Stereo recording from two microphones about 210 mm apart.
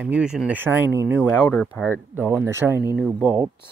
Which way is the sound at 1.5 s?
5° left (ahead or behind).